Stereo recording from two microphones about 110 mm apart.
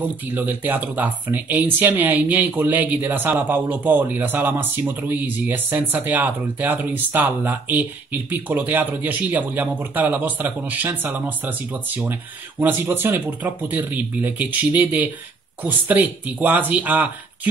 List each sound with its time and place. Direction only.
0.0 s speech: 15° right (ahead or behind)